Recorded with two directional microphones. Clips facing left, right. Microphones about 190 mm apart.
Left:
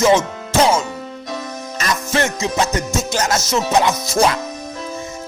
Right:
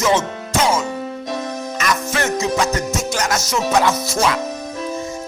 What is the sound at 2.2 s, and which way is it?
Music, 20° left (ahead or behind).